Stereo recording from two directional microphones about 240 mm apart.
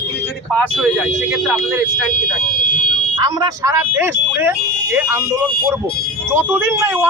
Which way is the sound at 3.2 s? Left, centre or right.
Centre.